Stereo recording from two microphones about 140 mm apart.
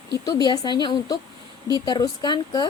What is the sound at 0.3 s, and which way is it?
Speech, 30° left (ahead or behind).